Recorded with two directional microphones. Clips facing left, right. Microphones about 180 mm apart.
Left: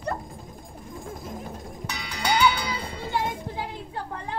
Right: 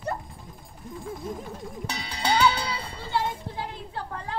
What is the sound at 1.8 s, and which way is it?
Cowbell, 30° right (ahead or behind).